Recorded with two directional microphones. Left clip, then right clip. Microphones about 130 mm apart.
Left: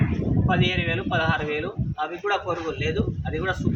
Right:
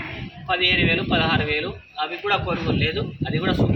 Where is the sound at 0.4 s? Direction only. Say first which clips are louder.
Right 6 dB; 10° left (ahead or behind).